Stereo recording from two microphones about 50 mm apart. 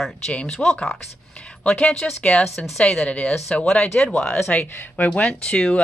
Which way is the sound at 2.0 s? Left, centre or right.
Centre.